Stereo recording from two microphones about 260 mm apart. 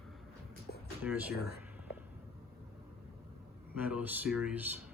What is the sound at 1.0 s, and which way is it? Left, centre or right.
Speech, centre.